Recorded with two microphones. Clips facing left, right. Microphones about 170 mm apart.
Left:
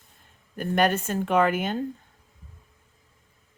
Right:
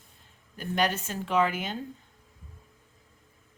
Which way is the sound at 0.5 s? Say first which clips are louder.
Left 5 dB; 55° left (ahead or behind).